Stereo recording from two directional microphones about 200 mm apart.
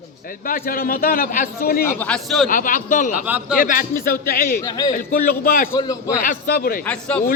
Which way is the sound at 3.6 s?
45° left (ahead or behind).